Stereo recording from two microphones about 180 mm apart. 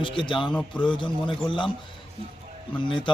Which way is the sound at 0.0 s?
30° left (ahead or behind).